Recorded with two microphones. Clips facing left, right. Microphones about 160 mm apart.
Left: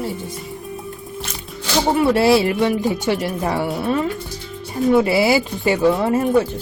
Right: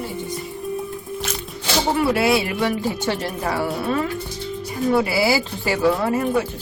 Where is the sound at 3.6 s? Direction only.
Centre (ahead or behind).